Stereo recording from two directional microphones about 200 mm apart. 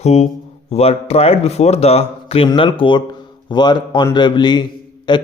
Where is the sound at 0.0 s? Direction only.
35° left (ahead or behind).